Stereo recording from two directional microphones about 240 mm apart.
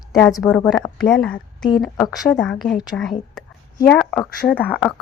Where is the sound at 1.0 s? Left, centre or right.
Centre.